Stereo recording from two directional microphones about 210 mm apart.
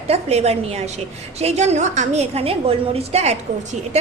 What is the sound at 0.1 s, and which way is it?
A woman's voice, 30° right (ahead or behind).